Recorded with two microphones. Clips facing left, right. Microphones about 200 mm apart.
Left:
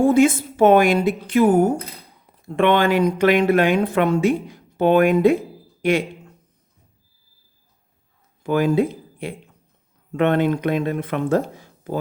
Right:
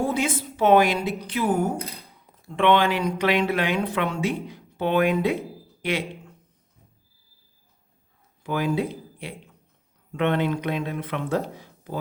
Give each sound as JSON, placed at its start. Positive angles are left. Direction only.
{"t": 0.0, "sound": "speech", "side_deg": 50}
{"t": 8.4, "sound": "speech", "side_deg": 50}